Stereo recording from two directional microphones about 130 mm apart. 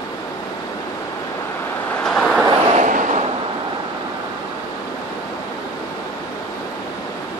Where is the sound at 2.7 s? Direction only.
70° right (ahead or behind).